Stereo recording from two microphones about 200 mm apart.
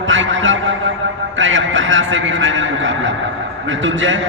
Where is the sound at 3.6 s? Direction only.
70° right (ahead or behind).